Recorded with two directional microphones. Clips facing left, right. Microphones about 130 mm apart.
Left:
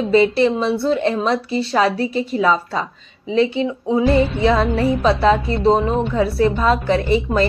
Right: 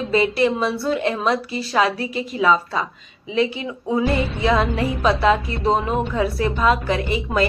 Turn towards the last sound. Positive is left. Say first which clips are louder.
# left 4 dB
turn(degrees=35)  # may be behind; listen again after turning